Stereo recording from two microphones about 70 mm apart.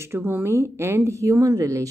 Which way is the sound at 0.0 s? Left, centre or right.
Right.